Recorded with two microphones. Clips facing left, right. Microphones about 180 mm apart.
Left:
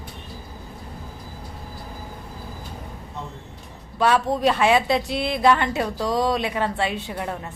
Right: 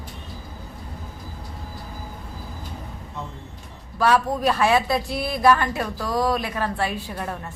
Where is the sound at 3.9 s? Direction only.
25° left (ahead or behind).